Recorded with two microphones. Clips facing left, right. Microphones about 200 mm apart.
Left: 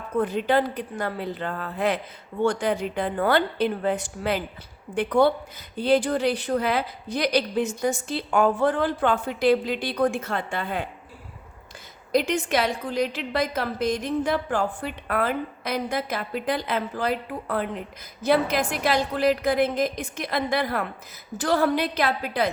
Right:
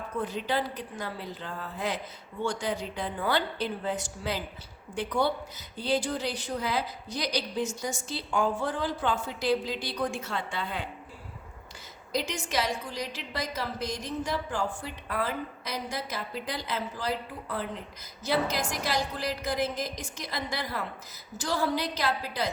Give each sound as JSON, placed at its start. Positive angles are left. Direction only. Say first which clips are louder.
{"t": 0.2, "sound": "a woman's voice", "louder": "left 8 dB", "side_deg": 55}
{"t": 12.1, "sound": "a woman's voice", "louder": "left 8 dB", "side_deg": 55}